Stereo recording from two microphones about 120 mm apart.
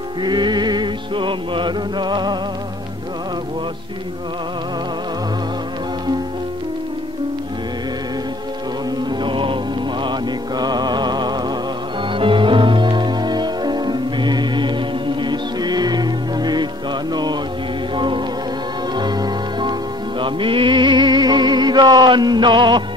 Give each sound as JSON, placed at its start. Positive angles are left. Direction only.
{"t": 0.2, "sound": "music", "side_deg": -40}
{"t": 9.2, "sound": "music", "side_deg": -45}
{"t": 17.1, "sound": "mantra", "side_deg": -35}
{"t": 17.9, "sound": "music", "side_deg": -40}